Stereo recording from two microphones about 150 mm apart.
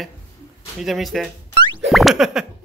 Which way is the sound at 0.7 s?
Centre (ahead or behind).